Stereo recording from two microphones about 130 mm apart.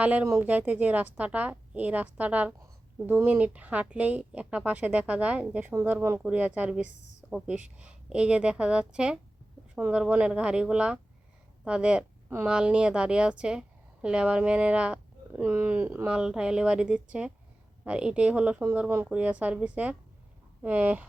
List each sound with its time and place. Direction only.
0.0 s a woman's voice: 10° right (ahead or behind)